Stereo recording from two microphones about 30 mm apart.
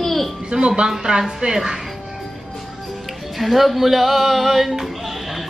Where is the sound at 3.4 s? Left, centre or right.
Centre.